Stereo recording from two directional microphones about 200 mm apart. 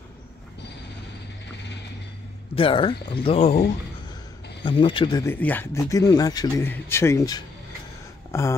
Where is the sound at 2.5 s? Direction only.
25° left (ahead or behind).